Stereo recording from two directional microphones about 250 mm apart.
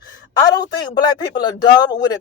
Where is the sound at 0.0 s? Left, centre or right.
Centre.